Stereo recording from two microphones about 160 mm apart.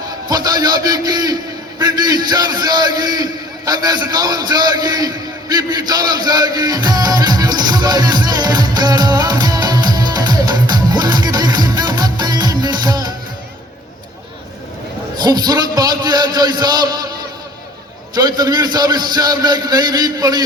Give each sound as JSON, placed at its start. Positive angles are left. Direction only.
{"t": 0.3, "sound": "a man's voice", "side_deg": -25}
{"t": 3.7, "sound": "a sound", "side_deg": -25}
{"t": 15.2, "sound": "a man's voice", "side_deg": -25}
{"t": 18.1, "sound": "a man's voice", "side_deg": -25}